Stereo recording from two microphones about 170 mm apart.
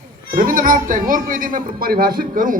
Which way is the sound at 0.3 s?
55° right (ahead or behind).